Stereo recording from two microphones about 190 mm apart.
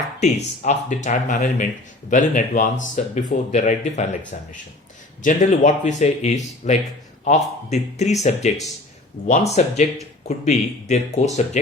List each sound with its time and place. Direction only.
0.2 s speech: 35° left (ahead or behind)